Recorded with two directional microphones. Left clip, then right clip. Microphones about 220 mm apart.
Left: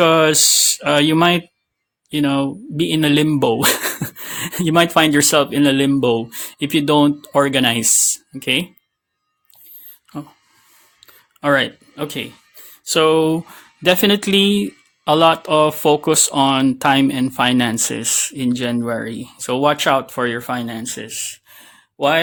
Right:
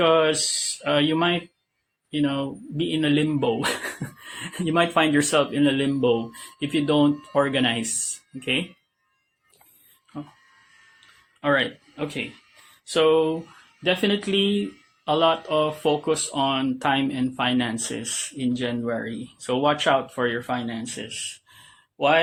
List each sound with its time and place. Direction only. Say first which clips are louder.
0.0 s speech: left 6 dB; 45° left (ahead or behind)
11.3 s speech: left 6 dB; 45° left (ahead or behind)